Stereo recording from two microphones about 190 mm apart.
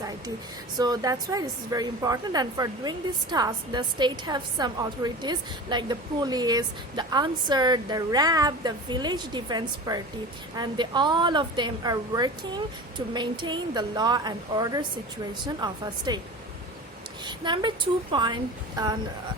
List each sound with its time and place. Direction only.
0.8 s a woman's voice: 20° right (ahead or behind)
17.2 s a woman's voice: 25° right (ahead or behind)